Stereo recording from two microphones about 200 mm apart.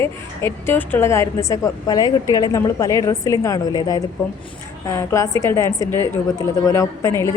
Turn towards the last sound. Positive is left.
turn(degrees=15)  # may be behind; listen again after turning